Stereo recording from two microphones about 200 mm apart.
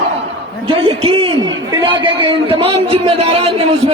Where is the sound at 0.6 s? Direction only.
30° right (ahead or behind).